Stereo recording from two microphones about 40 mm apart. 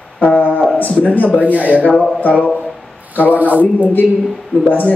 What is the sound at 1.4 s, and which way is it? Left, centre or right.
Speech, right.